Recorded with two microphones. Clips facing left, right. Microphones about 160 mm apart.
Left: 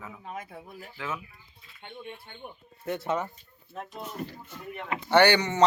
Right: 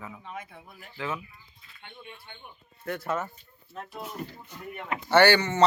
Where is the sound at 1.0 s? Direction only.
Centre (ahead or behind).